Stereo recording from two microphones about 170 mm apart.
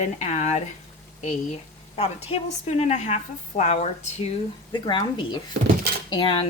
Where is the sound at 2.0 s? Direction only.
35° left (ahead or behind).